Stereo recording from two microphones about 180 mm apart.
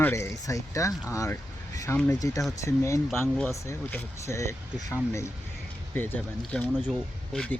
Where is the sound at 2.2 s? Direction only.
20° left (ahead or behind).